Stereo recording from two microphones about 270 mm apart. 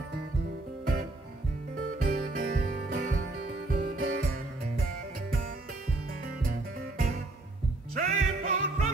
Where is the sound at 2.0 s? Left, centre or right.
Right.